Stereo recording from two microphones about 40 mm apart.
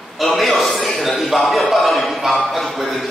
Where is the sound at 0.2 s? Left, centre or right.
Centre.